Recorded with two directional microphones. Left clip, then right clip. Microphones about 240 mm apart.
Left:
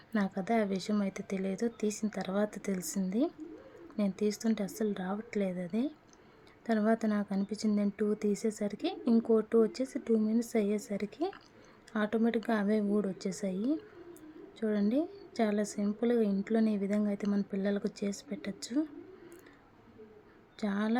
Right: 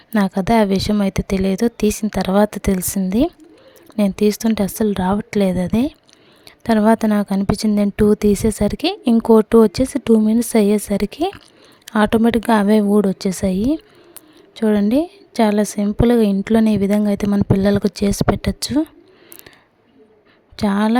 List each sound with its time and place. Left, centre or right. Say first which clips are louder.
0.1 s speech: right 15 dB; right
20.6 s speech: right 16 dB; right